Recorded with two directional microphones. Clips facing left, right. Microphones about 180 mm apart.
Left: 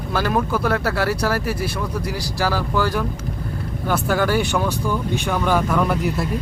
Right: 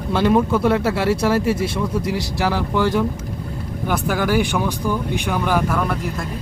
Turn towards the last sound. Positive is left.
turn(degrees=0)  # may be behind; listen again after turning